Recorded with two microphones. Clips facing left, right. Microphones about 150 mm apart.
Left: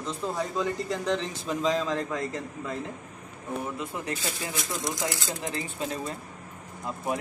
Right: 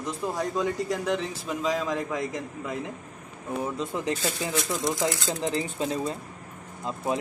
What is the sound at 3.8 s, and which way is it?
Speech, 20° right (ahead or behind).